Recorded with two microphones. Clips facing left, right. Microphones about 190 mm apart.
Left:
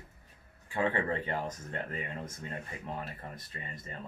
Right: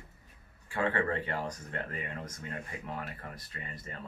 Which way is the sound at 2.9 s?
20° left (ahead or behind).